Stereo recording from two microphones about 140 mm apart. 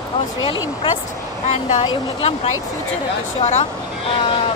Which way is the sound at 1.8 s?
35° left (ahead or behind).